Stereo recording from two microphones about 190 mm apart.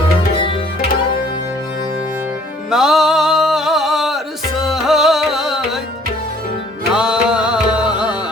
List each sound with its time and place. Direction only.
0.3 s music: 25° left (ahead or behind)
2.6 s music: centre (ahead or behind)
6.9 s music: 5° right (ahead or behind)